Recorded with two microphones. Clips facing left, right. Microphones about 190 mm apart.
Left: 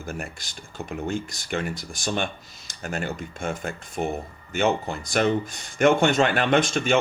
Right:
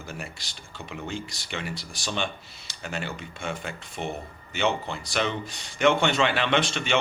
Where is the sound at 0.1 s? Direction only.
50° left (ahead or behind).